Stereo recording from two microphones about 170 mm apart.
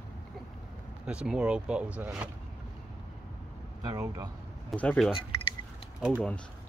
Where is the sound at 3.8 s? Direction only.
20° right (ahead or behind).